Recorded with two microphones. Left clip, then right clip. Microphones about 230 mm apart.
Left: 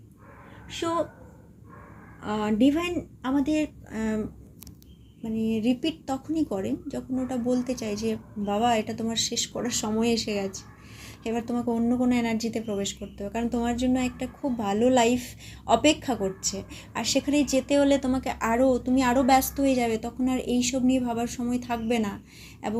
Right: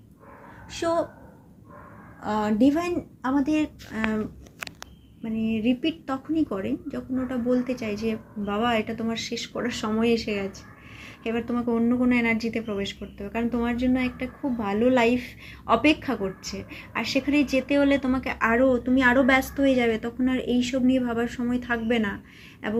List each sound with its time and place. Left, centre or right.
2.2 s speech: centre
5.2 s speech: left
11.0 s a sound: left
11.7 s a woman's voice: centre